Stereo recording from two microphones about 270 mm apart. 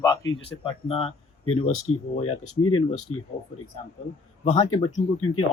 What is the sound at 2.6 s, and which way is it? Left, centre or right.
Speech, left.